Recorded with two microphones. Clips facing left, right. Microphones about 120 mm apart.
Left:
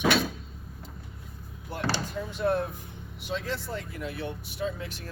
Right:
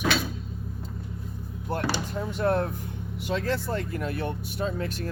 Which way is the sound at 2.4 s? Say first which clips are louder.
Right 2 dB; 55° right (ahead or behind).